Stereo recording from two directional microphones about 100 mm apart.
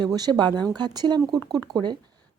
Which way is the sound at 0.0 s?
45° right (ahead or behind).